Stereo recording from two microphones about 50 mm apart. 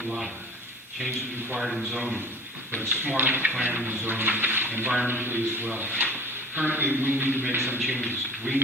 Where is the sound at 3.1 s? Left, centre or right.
Right.